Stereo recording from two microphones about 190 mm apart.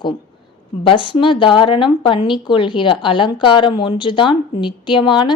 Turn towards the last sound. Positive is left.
turn(degrees=25)  # may be behind; listen again after turning